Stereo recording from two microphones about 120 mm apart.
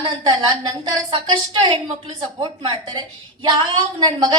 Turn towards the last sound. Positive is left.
turn(degrees=-35)  # may be behind; listen again after turning